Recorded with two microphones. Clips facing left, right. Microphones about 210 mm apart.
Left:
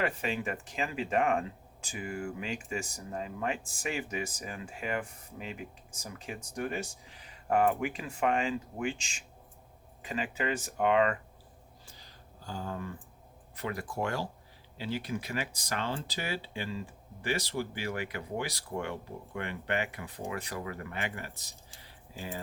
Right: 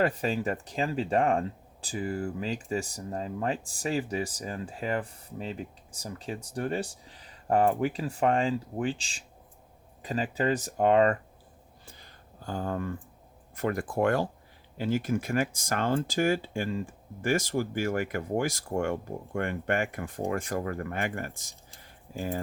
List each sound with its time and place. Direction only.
0.0 s speech: 40° right (ahead or behind)
11.9 s a sound: 55° right (ahead or behind)
13.6 s speech: 50° right (ahead or behind)
21.8 s keys jangling: 50° right (ahead or behind)